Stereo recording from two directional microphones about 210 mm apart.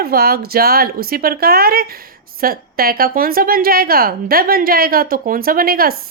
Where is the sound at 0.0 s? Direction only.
45° right (ahead or behind).